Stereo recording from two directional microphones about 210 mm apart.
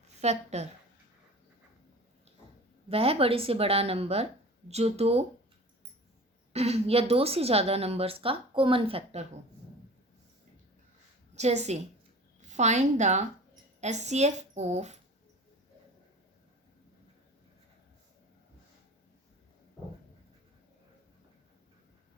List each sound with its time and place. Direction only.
0.2 s speech: 30° right (ahead or behind)
2.9 s a woman's voice: 25° right (ahead or behind)
6.5 s a woman's voice: 30° right (ahead or behind)
11.3 s a woman's voice: 30° right (ahead or behind)